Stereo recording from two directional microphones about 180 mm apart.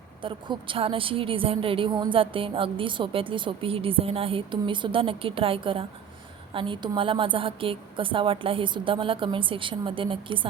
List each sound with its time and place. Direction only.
0.2 s a woman's voice: 25° right (ahead or behind)